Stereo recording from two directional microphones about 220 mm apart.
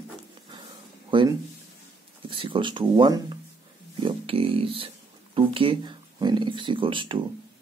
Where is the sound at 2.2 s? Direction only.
20° right (ahead or behind).